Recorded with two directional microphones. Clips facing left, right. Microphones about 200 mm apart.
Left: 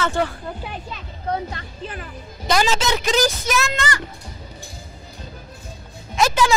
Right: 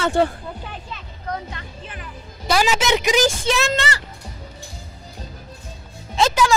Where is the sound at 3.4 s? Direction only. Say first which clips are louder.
Right 2 dB; 30° right (ahead or behind).